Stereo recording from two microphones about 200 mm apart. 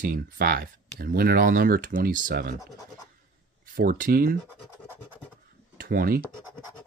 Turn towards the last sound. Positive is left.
turn(degrees=-45)  # may be behind; listen again after turning